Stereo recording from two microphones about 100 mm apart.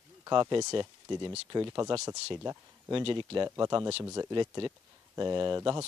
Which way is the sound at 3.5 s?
35° right (ahead or behind).